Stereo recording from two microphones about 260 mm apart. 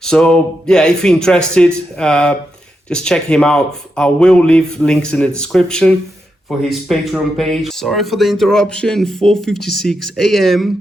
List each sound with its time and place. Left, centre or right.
0.0 s speech: centre